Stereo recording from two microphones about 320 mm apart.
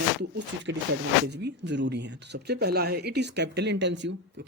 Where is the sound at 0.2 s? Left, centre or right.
Right.